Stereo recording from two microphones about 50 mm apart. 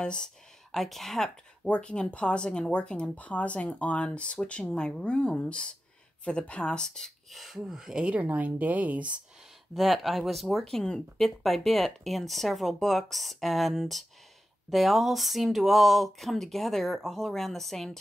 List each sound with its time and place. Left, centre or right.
0.0 s a sound: centre
0.7 s speech: centre
1.7 s speech: centre
7.2 s speech: centre
8.2 s speech: right
9.8 s speech: centre